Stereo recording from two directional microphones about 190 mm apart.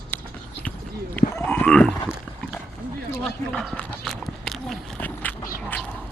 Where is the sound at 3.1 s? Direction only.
5° left (ahead or behind).